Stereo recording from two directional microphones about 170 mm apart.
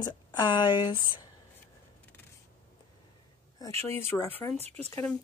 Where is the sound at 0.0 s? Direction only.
25° left (ahead or behind).